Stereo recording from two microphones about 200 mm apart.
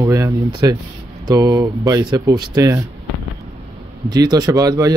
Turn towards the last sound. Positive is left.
turn(degrees=-15)  # may be behind; listen again after turning